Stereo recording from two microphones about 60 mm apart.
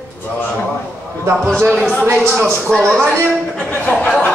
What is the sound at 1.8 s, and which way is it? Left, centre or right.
Speech, centre.